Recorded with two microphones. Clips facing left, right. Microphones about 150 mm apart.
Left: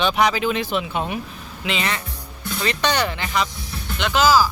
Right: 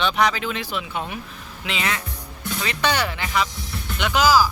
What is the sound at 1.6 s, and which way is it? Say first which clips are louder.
Speech: left 2 dB; 5° right (ahead or behind).